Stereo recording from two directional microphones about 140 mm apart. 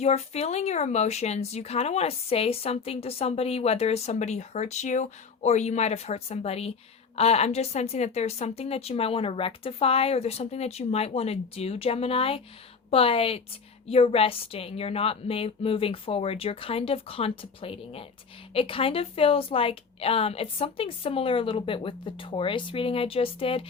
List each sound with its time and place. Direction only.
0.0 s a woman's voice: 50° left (ahead or behind)